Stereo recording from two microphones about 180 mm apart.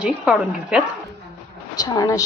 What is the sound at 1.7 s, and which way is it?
Speech, 20° left (ahead or behind).